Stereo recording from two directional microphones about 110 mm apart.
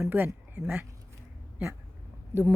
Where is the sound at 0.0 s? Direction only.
20° right (ahead or behind).